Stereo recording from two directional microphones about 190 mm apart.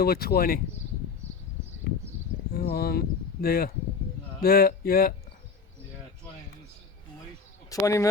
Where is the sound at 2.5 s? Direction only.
55° left (ahead or behind).